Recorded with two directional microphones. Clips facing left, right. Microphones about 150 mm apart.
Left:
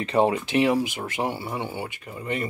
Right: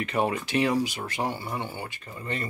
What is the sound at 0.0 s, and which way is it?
Speech, 30° left (ahead or behind).